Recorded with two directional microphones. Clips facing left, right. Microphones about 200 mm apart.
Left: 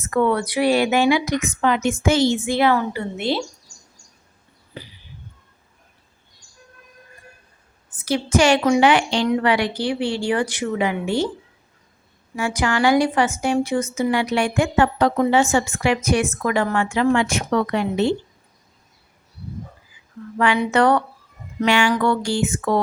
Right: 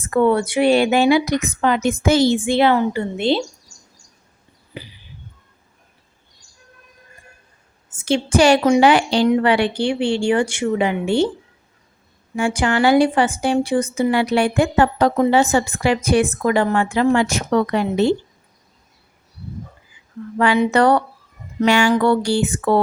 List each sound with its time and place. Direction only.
0.0 s a woman's voice: 30° right (ahead or behind)
8.0 s a woman's voice: 30° right (ahead or behind)
12.4 s a woman's voice: 30° right (ahead or behind)
20.6 s a woman's voice: 35° right (ahead or behind)